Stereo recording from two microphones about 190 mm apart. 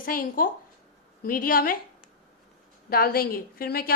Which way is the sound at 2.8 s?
50° left (ahead or behind).